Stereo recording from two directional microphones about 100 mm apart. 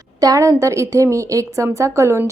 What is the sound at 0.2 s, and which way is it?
A woman's voice, 35° right (ahead or behind).